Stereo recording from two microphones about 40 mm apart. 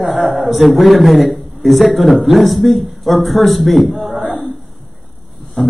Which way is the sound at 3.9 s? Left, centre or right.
Right.